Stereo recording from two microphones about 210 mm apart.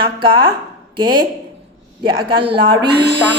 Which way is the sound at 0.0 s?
25° right (ahead or behind).